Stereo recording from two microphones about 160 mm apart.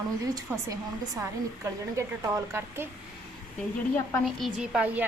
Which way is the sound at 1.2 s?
20° right (ahead or behind).